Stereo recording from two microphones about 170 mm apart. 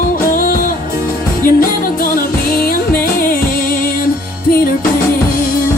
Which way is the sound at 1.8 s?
55° left (ahead or behind).